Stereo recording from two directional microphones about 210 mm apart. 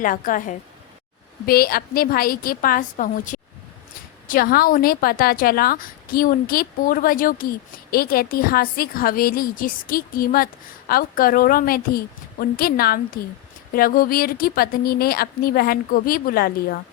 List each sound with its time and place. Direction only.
0.0 s a woman's voice: 40° left (ahead or behind)